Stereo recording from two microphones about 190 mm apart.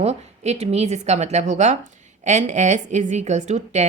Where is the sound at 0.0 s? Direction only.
35° right (ahead or behind).